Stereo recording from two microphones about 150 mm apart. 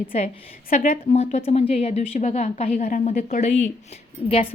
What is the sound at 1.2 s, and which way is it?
A woman's voice, 50° left (ahead or behind).